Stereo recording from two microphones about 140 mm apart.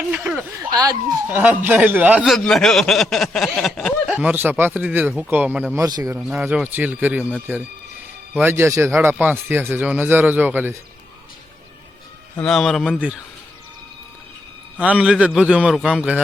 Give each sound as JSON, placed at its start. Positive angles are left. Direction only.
{"t": 0.1, "sound": "a sound", "side_deg": -10}
{"t": 0.7, "sound": "speech", "side_deg": -25}
{"t": 1.3, "sound": "a man's voice", "side_deg": -10}
{"t": 2.2, "sound": "speech", "side_deg": 0}
{"t": 5.8, "sound": "speech", "side_deg": -25}
{"t": 6.1, "sound": "a man's voice", "side_deg": -5}
{"t": 8.4, "sound": "a man's voice", "side_deg": -15}
{"t": 12.4, "sound": "speech", "side_deg": 5}
{"t": 14.8, "sound": "a man's voice", "side_deg": -10}